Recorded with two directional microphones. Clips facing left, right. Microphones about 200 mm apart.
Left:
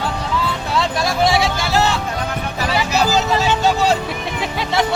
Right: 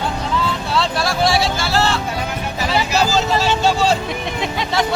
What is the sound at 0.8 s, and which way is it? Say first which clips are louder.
Vehicle: left 1 dB; 20° left (ahead or behind).